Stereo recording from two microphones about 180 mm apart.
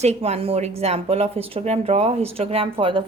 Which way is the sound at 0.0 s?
35° right (ahead or behind).